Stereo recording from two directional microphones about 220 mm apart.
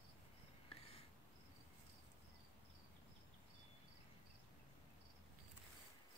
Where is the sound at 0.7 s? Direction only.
25° left (ahead or behind).